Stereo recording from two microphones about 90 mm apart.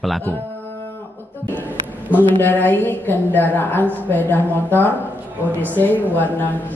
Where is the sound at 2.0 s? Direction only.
20° left (ahead or behind).